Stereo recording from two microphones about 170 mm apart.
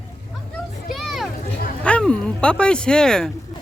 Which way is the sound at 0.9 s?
Centre (ahead or behind).